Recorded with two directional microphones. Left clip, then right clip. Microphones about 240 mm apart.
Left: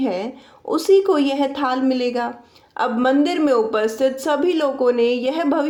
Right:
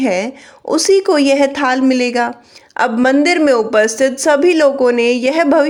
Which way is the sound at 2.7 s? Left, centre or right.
Right.